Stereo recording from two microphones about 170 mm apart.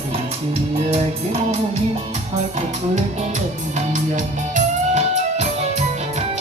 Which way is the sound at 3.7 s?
45° right (ahead or behind).